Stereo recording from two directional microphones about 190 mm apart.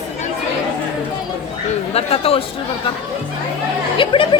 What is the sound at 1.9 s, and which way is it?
Speech, 30° left (ahead or behind).